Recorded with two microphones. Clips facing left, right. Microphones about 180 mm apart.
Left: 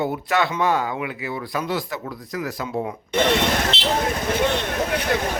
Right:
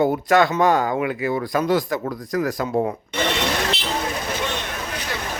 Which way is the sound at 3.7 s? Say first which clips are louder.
Left 2 dB; 25° left (ahead or behind).